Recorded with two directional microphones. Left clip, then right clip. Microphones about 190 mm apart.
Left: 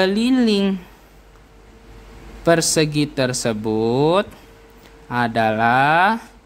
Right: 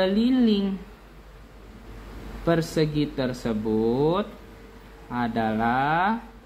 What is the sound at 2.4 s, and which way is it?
A man's voice, 40° left (ahead or behind).